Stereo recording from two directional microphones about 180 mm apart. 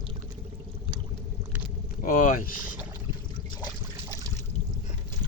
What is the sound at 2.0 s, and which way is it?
Speech, 50° left (ahead or behind).